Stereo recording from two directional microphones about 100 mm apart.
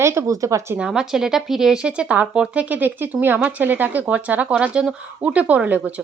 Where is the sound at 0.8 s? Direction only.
5° right (ahead or behind).